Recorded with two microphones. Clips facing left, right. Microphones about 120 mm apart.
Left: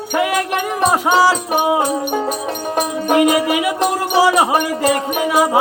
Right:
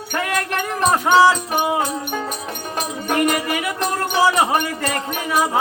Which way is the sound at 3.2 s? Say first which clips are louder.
Left 6 dB; 15° left (ahead or behind).